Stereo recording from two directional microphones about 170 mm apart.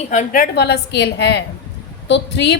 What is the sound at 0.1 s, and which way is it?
A woman's voice, 50° left (ahead or behind).